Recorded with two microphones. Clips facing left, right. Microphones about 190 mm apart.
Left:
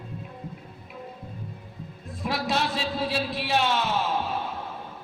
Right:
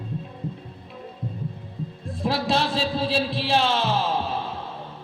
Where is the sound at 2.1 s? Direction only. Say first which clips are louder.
Right 4 dB; 30° right (ahead or behind).